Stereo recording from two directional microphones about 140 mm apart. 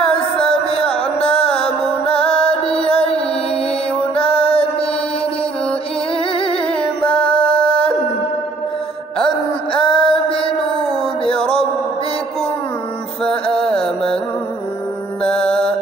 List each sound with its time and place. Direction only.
0.0 s music: 40° left (ahead or behind)
6.1 s humming: 40° left (ahead or behind)
7.3 s a sound: 40° left (ahead or behind)
9.2 s music: 40° left (ahead or behind)
13.2 s music: 5° left (ahead or behind)
15.2 s music: 5° left (ahead or behind)